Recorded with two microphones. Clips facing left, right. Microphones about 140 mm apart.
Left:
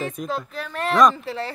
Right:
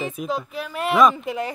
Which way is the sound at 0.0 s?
5° right (ahead or behind).